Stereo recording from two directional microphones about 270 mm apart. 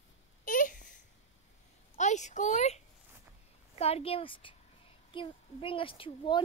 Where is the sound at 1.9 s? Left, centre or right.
Left.